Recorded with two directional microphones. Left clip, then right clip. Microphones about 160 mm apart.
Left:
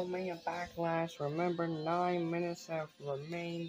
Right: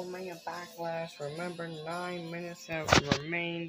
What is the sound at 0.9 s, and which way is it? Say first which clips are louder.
Music: left 1 dB; 25° left (ahead or behind).